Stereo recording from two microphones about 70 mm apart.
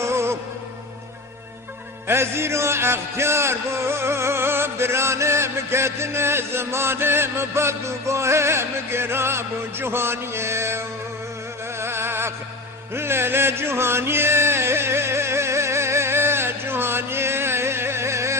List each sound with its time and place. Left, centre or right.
0.0 s music: right
2.0 s music: right
11.8 s a sound: right
12.9 s music: right